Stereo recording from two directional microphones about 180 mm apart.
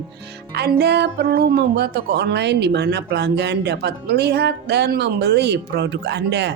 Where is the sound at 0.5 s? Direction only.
65° right (ahead or behind).